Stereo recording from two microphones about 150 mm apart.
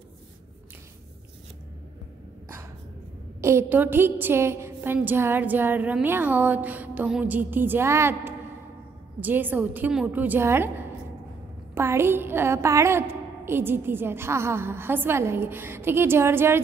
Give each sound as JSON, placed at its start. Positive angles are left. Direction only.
{"t": 3.3, "sound": "a woman's voice", "side_deg": -20}